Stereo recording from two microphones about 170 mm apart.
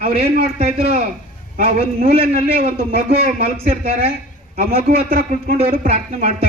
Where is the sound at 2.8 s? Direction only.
60° right (ahead or behind).